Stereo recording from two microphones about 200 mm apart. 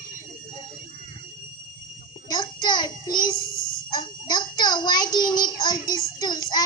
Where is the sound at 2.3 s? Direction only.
20° left (ahead or behind).